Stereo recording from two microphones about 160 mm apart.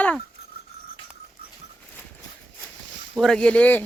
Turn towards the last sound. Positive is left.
turn(degrees=10)  # may be behind; listen again after turning